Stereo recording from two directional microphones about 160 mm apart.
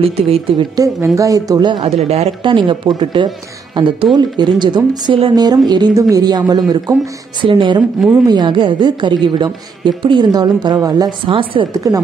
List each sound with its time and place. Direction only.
0.0 s speech: 35° right (ahead or behind)
0.7 s a woman's voice: 20° right (ahead or behind)
1.9 s a woman's voice: 40° right (ahead or behind); by 12.0 s 25° right (ahead or behind)